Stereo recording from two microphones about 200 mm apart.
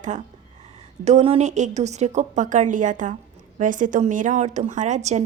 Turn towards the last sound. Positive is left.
turn(degrees=-35)  # may be behind; listen again after turning